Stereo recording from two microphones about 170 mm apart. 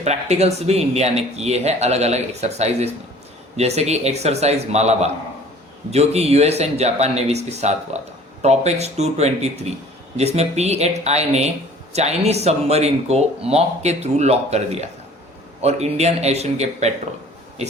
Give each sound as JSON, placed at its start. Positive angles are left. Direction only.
{"t": 0.0, "sound": "speech", "side_deg": -40}